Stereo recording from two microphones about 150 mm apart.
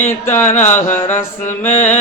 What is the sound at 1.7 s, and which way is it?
Mantra, 55° left (ahead or behind).